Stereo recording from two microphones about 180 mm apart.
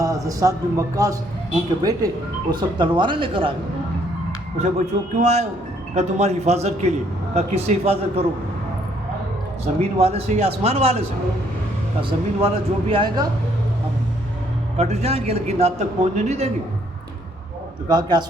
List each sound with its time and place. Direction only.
0.0 s speech: 20° right (ahead or behind)
5.2 s a man's voice: 40° right (ahead or behind)
9.7 s speech: 45° right (ahead or behind)
10.0 s a man's voice: 35° right (ahead or behind)
12.0 s speech: 30° right (ahead or behind)
14.8 s a man's voice: 35° right (ahead or behind)
17.8 s speech: 25° right (ahead or behind)